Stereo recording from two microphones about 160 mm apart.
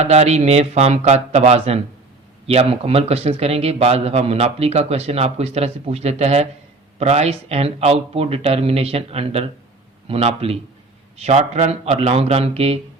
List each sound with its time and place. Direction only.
0.0 s speech: 45° right (ahead or behind)